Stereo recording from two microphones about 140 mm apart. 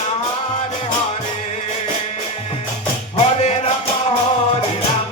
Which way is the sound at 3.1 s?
50° left (ahead or behind).